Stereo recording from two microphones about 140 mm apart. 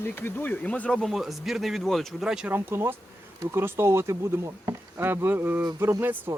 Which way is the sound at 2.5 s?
15° right (ahead or behind).